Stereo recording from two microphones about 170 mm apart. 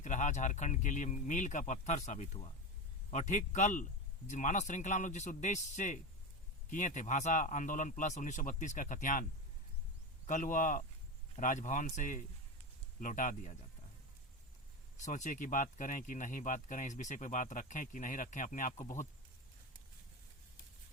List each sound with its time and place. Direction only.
0.0 s speech: 45° left (ahead or behind)
10.2 s speech: 50° left (ahead or behind)
15.0 s speech: 45° left (ahead or behind)